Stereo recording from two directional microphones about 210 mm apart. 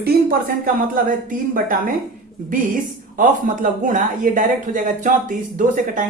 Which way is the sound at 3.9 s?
40° right (ahead or behind).